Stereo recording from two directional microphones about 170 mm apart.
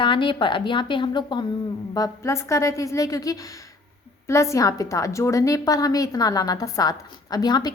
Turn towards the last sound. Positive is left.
turn(degrees=25)  # may be behind; listen again after turning